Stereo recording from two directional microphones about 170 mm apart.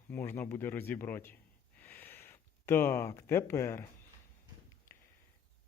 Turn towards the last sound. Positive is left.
turn(degrees=20)  # may be behind; listen again after turning